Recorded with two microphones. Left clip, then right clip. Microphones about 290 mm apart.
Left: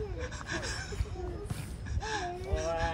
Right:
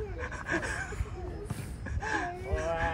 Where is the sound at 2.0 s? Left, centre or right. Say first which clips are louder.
Right 3 dB; centre.